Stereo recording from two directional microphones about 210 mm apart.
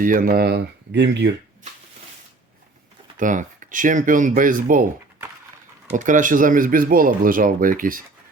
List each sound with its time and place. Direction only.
0.0 s speech: 40° right (ahead or behind); by 1.4 s 55° right (ahead or behind)
3.2 s speech: 40° right (ahead or behind)
5.9 s speech: 35° right (ahead or behind)